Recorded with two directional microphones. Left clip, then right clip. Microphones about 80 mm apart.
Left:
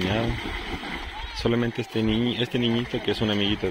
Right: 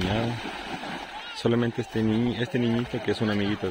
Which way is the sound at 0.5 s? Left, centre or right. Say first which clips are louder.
Left 2 dB; centre.